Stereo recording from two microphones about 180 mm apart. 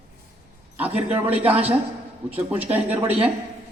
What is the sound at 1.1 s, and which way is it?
A man's voice, 10° right (ahead or behind).